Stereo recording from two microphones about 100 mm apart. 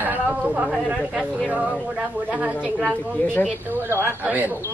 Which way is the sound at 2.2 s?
10° right (ahead or behind).